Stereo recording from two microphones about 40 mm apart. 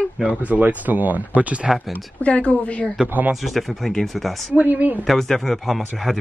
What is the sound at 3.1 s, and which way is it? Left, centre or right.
Speech, right.